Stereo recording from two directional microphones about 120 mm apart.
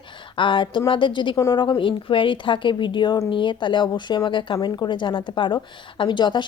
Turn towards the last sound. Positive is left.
turn(degrees=40)  # may be behind; listen again after turning